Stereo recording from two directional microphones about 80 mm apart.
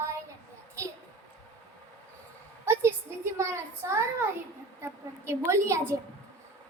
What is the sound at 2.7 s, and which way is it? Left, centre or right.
A woman's voice, right.